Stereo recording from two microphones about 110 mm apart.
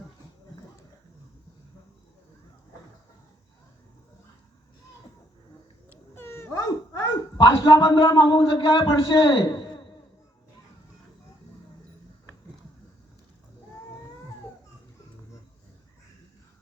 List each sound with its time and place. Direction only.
6.1 s dog: 20° left (ahead or behind); by 9.9 s 40° left (ahead or behind)